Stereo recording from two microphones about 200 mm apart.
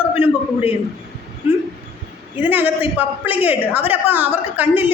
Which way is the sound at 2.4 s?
10° right (ahead or behind).